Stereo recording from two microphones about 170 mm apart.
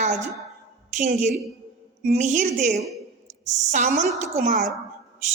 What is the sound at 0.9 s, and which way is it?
A woman's voice, 45° right (ahead or behind).